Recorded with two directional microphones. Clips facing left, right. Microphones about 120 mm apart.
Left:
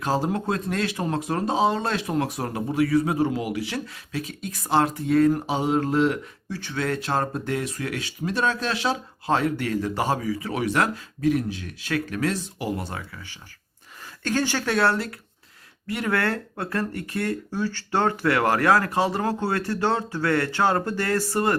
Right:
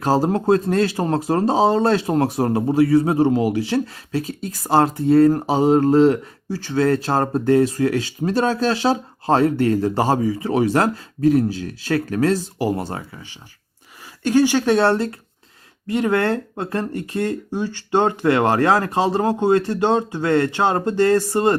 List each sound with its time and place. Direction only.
0.0 s speech: 40° right (ahead or behind)
14.3 s speech: 15° right (ahead or behind)